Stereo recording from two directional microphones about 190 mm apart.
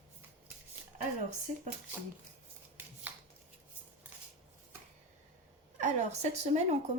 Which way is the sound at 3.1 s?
10° right (ahead or behind).